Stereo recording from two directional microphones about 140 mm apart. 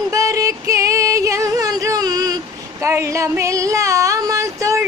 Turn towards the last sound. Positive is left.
turn(degrees=-20)  # may be behind; listen again after turning